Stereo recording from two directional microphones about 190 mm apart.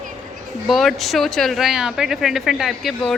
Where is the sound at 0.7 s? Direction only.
Centre (ahead or behind).